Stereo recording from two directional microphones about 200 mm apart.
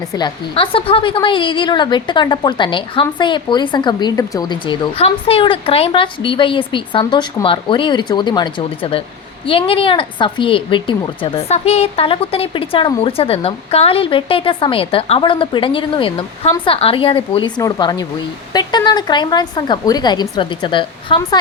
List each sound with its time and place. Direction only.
0.2 s a woman's voice: 25° left (ahead or behind)